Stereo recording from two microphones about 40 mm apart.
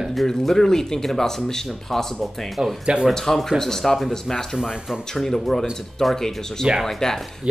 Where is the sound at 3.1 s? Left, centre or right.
Centre.